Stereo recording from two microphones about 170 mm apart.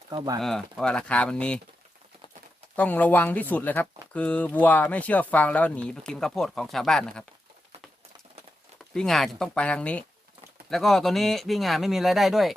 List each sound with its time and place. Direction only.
0.1 s speech: 25° right (ahead or behind)
0.3 s speech: centre (ahead or behind)
2.7 s speech: 10° left (ahead or behind)
9.0 s speech: centre (ahead or behind)